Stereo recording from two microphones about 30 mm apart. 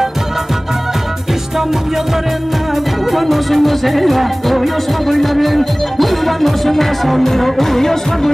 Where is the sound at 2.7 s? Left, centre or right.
Centre.